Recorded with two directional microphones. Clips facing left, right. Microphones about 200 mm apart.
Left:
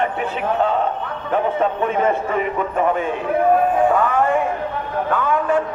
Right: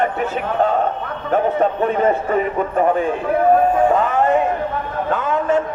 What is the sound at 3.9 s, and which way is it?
Music, 20° right (ahead or behind).